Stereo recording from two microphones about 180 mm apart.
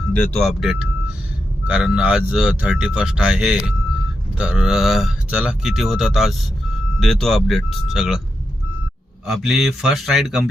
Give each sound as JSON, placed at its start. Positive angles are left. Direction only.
{"t": 0.1, "sound": "speech", "side_deg": 5}
{"t": 9.2, "sound": "speech", "side_deg": 0}